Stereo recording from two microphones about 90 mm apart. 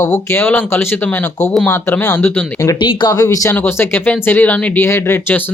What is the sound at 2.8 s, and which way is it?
Speech, 60° left (ahead or behind).